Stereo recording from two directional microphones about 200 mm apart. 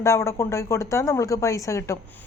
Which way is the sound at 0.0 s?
15° left (ahead or behind).